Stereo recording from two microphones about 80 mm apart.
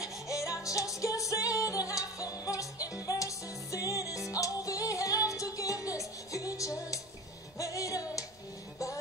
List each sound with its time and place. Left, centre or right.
0.0 s music: left